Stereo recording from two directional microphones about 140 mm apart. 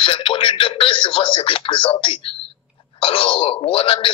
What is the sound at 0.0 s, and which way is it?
Speech, 40° left (ahead or behind).